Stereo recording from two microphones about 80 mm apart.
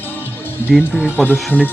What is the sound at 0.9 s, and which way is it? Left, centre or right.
Speech, left.